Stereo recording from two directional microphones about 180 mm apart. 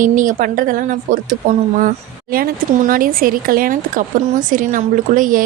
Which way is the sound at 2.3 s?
50° right (ahead or behind).